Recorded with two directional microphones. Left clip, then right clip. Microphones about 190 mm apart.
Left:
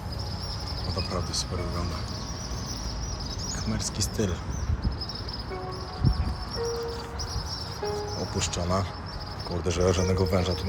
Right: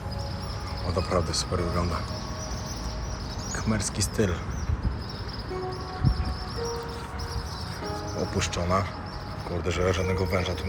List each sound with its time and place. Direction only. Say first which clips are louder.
3.7 s speech: right 3 dB; 15° left (ahead or behind)
8.4 s a man's voice: right 2 dB; 20° left (ahead or behind)